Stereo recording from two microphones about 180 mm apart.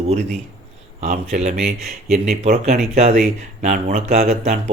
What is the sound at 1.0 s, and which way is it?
Speech, 40° right (ahead or behind).